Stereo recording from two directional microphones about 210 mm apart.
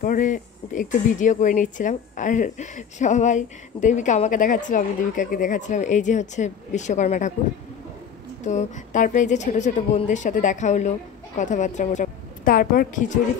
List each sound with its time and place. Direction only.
0.0 s speech: 40° left (ahead or behind)
8.5 s speech: 35° left (ahead or behind)